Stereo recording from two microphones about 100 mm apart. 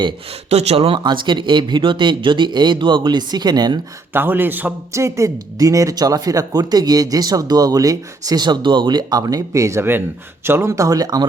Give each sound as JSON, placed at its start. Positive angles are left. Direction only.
{"t": 0.5, "sound": "speech", "side_deg": -90}
{"t": 4.1, "sound": "a man's voice", "side_deg": -20}
{"t": 4.9, "sound": "speech", "side_deg": -30}